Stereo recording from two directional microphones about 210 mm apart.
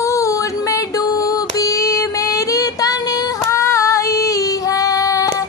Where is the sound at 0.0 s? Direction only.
15° left (ahead or behind).